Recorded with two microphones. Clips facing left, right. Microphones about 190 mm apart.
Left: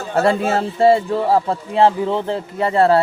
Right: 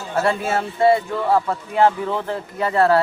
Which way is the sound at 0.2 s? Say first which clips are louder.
Left 4 dB; 30° left (ahead or behind).